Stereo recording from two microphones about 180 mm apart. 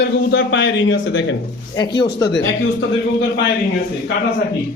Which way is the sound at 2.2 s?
80° left.